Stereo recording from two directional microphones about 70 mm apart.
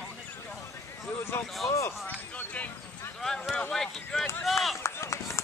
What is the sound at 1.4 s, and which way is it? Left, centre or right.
Speech, centre.